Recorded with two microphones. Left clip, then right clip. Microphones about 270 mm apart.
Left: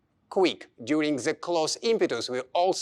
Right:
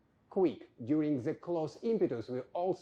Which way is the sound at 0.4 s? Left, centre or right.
Centre.